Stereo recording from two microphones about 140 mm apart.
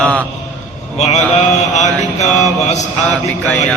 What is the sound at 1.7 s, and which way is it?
A man's voice, 55° left (ahead or behind).